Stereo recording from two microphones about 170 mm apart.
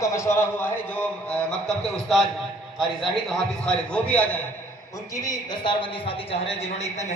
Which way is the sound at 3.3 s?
5° left (ahead or behind).